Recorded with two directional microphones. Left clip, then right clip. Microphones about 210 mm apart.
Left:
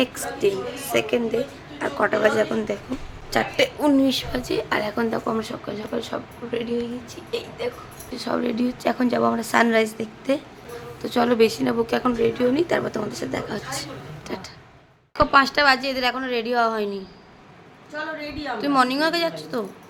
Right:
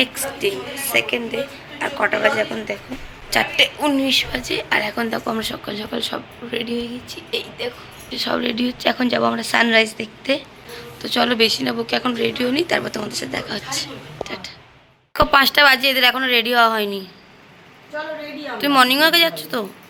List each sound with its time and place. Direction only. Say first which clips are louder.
0.2 s a woman's voice: even; 25° left (ahead or behind)
5.2 s speech: right 2 dB; centre (ahead or behind)
8.1 s speech: right 4 dB; centre (ahead or behind); by 14.5 s 25° left (ahead or behind)
15.1 s speech: right 3 dB; 5° right (ahead or behind)
18.6 s speech: right 6 dB; centre (ahead or behind)